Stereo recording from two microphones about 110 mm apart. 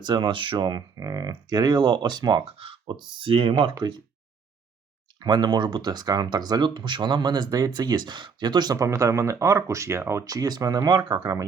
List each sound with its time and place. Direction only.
0.0 s speech: 45° right (ahead or behind)
3.8 s speech: 35° right (ahead or behind)
5.2 s speech: 40° right (ahead or behind)